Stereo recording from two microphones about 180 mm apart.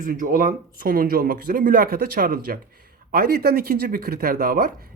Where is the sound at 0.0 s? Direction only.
45° right (ahead or behind).